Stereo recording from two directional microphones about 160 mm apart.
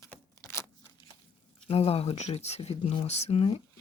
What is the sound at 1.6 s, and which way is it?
Speech, 40° left (ahead or behind).